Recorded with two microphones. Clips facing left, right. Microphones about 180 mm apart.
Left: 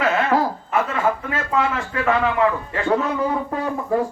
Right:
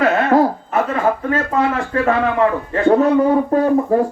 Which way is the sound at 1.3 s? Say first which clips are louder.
Right 4 dB; 40° right (ahead or behind).